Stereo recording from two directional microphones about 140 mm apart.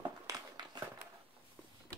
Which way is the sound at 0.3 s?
30° right (ahead or behind).